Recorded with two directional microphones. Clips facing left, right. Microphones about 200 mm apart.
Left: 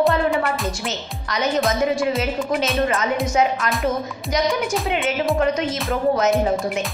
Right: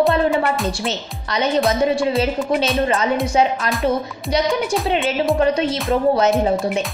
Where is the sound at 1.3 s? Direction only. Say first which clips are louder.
Right 3 dB; 30° right (ahead or behind).